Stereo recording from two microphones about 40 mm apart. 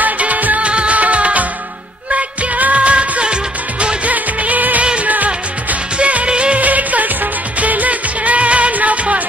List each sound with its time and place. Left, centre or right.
0.0 s music: right
0.6 s music: right
3.8 s music of bollywood: right
5.0 s music: right
5.9 s music: right
6.6 s music: right